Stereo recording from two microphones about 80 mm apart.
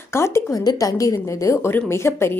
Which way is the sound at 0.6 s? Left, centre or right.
Left.